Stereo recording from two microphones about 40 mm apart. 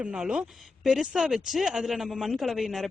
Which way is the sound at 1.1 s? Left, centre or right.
Centre.